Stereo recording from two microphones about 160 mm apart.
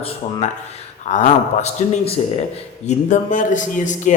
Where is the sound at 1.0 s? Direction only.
50° left (ahead or behind).